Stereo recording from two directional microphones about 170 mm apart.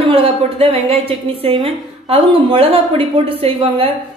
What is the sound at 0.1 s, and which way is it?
A woman's voice, 35° right (ahead or behind).